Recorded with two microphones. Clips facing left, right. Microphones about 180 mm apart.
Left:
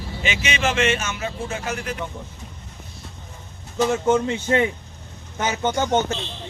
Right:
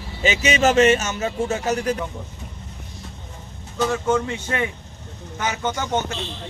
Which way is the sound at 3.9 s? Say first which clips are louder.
Left 2 dB; 25° left (ahead or behind).